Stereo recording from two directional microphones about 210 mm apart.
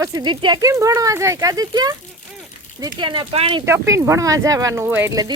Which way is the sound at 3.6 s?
15° right (ahead or behind).